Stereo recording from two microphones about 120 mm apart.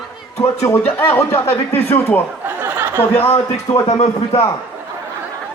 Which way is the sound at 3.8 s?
60° left (ahead or behind).